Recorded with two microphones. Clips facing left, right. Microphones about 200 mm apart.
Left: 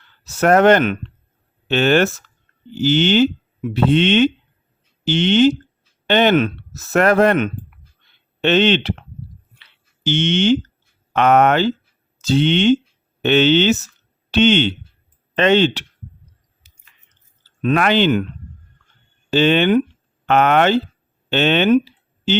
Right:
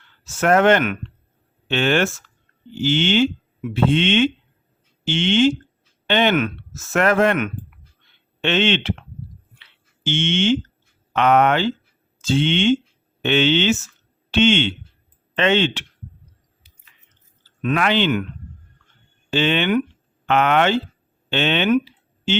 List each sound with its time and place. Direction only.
0.3 s speech: 40° left (ahead or behind)
9.6 s a sound: 40° left (ahead or behind)
11.1 s speech: 45° left (ahead or behind)
16.7 s biting: 45° left (ahead or behind)
17.7 s speech: 45° left (ahead or behind)
19.3 s speech: 40° left (ahead or behind)